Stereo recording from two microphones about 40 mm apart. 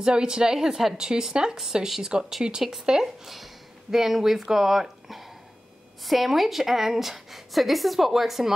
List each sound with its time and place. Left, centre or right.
0.0 s speech: centre
3.0 s speech: centre